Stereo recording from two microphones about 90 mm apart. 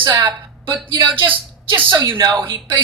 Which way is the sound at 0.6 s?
60° right (ahead or behind).